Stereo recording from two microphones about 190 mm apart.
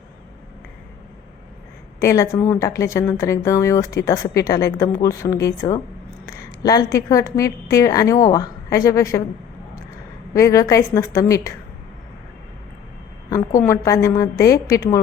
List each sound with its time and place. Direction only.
2.0 s speech: 15° left (ahead or behind)
10.3 s speech: 15° left (ahead or behind)
13.7 s speech: 15° left (ahead or behind)